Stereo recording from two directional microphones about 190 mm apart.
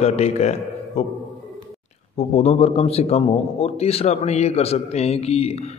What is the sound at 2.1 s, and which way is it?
A man's voice, 35° left (ahead or behind).